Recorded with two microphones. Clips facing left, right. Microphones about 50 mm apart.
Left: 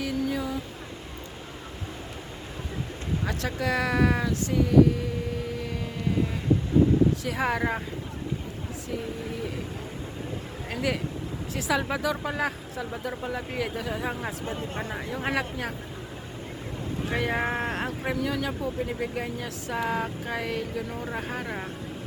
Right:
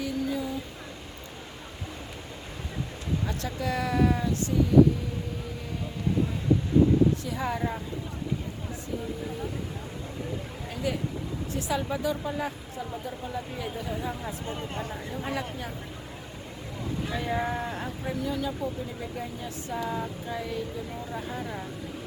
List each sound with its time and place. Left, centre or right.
0.0 s a sound: left
3.2 s a woman's voice: left
7.3 s a woman's voice: left
10.7 s a woman's voice: left
17.1 s speech: left
18.6 s speech: left
21.0 s speech: left